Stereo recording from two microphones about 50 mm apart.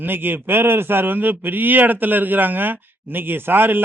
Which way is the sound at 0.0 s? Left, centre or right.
Right.